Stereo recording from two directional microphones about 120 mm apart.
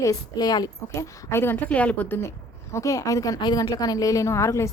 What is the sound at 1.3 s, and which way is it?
A woman's voice, 20° left (ahead or behind).